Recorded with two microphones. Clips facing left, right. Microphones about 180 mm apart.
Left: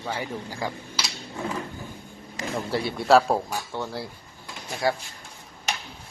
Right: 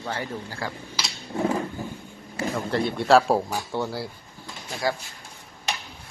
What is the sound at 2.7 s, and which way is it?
A man's voice, 5° left (ahead or behind).